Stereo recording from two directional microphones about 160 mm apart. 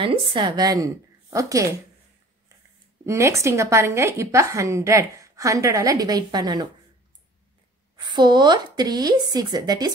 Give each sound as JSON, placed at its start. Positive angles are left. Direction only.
{"t": 0.0, "sound": "a woman's voice", "side_deg": -30}
{"t": 3.1, "sound": "a woman's voice", "side_deg": -20}
{"t": 7.9, "sound": "a woman's voice", "side_deg": -25}